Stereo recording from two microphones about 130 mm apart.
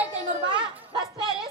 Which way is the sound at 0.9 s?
35° right (ahead or behind).